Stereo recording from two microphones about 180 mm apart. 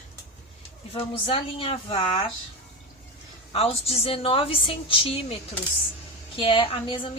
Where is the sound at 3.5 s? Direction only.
35° left (ahead or behind).